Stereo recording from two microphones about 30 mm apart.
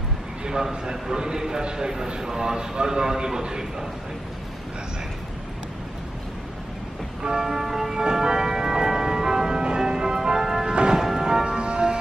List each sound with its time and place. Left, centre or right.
0.4 s a man's voice: right
7.4 s church bell: centre
8.0 s church bell: centre
9.8 s music: right
10.7 s music: right
11.0 s music: centre
11.4 s music: right